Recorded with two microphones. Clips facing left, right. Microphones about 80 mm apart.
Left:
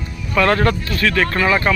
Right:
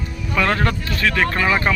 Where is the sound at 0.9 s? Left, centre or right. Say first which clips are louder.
Left 1 dB; centre.